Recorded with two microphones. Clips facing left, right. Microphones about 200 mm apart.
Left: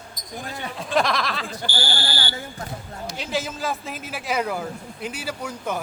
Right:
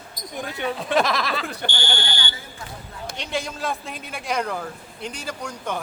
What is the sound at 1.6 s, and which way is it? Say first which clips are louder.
Speech: even; 35° left (ahead or behind).